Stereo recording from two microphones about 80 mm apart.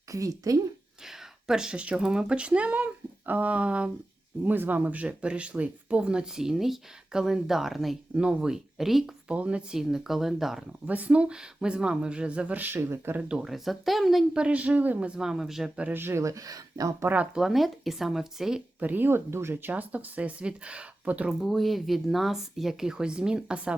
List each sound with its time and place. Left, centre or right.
0.1 s speech: right
1.0 s speech: centre
8.1 s speech: centre
9.3 s speech: centre
10.8 s speech: centre
13.1 s speech: centre
14.3 s speech: centre
15.9 s speech: right
17.3 s speech: centre
18.8 s speech: right
21.2 s speech: centre